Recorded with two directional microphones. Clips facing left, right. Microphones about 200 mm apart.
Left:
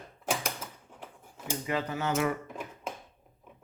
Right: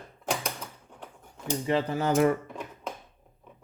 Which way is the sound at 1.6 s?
30° right (ahead or behind).